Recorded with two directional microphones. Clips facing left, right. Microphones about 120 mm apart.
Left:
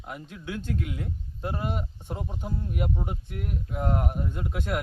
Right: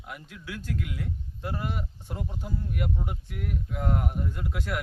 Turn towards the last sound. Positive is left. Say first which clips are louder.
# left 2 dB
turn(degrees=20)  # may be behind; listen again after turning